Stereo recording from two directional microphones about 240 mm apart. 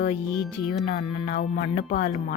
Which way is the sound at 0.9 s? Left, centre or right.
Left.